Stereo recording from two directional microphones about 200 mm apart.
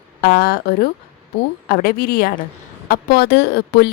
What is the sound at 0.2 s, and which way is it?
A woman's voice, 50° left (ahead or behind).